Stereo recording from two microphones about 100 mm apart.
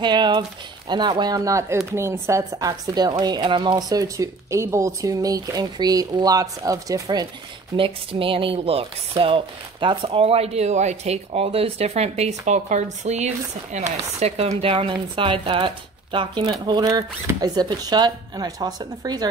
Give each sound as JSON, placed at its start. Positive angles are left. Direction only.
{"t": 0.0, "sound": "a woman's voice", "side_deg": -50}
{"t": 7.7, "sound": "speech", "side_deg": -65}
{"t": 14.2, "sound": "speech", "side_deg": -90}
{"t": 14.9, "sound": "speech", "side_deg": -60}